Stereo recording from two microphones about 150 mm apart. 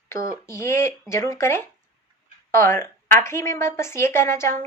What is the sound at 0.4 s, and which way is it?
A woman's voice, 20° left (ahead or behind).